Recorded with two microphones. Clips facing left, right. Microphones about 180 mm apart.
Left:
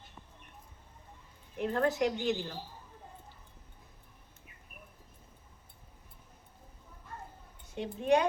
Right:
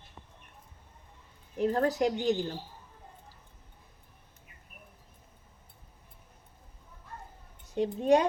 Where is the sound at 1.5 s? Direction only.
35° right (ahead or behind).